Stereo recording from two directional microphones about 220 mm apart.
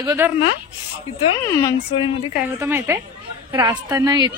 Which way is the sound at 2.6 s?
15° right (ahead or behind).